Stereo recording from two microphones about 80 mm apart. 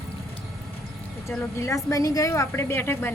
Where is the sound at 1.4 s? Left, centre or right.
Left.